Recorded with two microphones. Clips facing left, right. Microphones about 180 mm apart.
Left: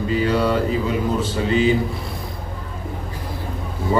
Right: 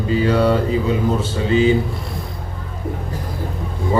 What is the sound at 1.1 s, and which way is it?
Speech, 30° right (ahead or behind).